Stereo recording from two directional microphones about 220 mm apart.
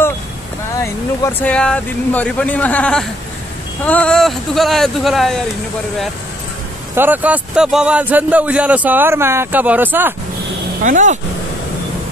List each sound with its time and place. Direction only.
1.2 s speech: 5° left (ahead or behind)
7.0 s a man's voice: 10° right (ahead or behind)
10.8 s speech: 35° right (ahead or behind)